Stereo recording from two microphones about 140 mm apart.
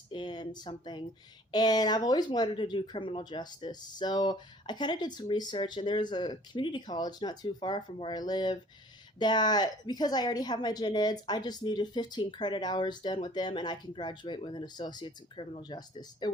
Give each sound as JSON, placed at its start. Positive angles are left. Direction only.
{"t": 0.1, "sound": "speech", "side_deg": 30}